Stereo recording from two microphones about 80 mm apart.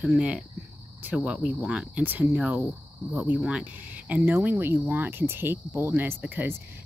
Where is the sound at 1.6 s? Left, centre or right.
Centre.